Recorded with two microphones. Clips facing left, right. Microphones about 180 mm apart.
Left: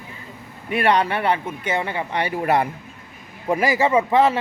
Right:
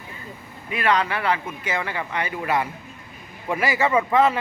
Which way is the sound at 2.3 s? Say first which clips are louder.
Left 5 dB; 40° left (ahead or behind).